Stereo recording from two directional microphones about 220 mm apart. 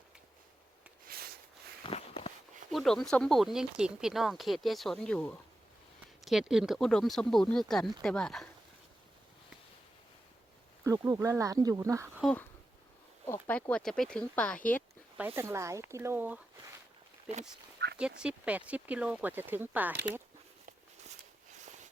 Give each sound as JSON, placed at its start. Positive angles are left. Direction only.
{"t": 1.0, "sound": "a sound", "side_deg": -45}
{"t": 1.8, "sound": "walk", "side_deg": 25}
{"t": 2.6, "sound": "speech", "side_deg": 0}
{"t": 10.8, "sound": "speech", "side_deg": -15}
{"t": 12.2, "sound": "speech", "side_deg": 5}
{"t": 15.4, "sound": "speech", "side_deg": -15}
{"t": 17.8, "sound": "speech", "side_deg": -50}
{"t": 18.2, "sound": "speech", "side_deg": -5}